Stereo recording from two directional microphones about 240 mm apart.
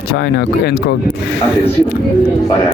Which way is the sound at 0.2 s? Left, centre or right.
Left.